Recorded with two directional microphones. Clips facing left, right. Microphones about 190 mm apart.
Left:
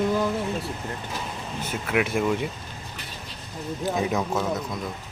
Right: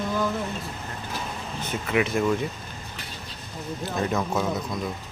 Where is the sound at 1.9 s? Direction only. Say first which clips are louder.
Even; 5° left (ahead or behind).